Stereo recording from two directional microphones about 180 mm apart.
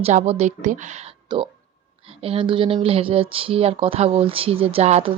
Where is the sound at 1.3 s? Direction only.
25° right (ahead or behind).